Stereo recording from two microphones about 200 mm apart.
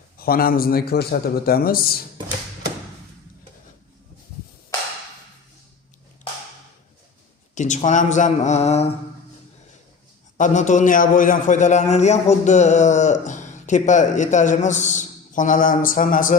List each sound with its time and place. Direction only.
0.2 s a man's voice: 50° left (ahead or behind)
7.5 s a man's voice: 35° left (ahead or behind)
10.3 s a man's voice: 40° left (ahead or behind)